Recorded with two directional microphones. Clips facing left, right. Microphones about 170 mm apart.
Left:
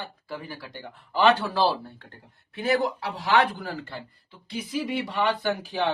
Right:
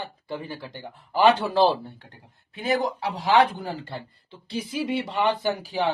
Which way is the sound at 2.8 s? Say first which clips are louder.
Right 1 dB; 20° right (ahead or behind).